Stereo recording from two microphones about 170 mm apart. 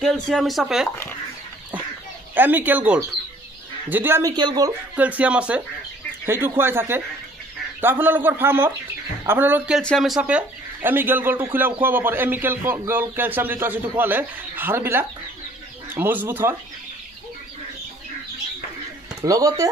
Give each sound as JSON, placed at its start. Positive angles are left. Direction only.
{"t": 0.0, "sound": "speech", "side_deg": 0}
{"t": 2.3, "sound": "speech", "side_deg": -10}
{"t": 4.9, "sound": "speech", "side_deg": -10}
{"t": 9.8, "sound": "speech", "side_deg": 0}
{"t": 19.2, "sound": "speech", "side_deg": -20}